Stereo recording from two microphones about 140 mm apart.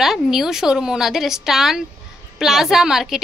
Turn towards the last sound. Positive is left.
turn(degrees=-5)  # may be behind; listen again after turning